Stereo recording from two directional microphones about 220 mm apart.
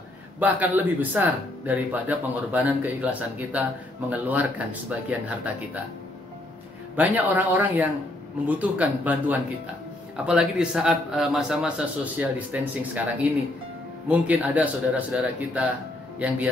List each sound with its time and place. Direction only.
0.4 s speech: 5° right (ahead or behind)
7.0 s a man's voice: 5° right (ahead or behind)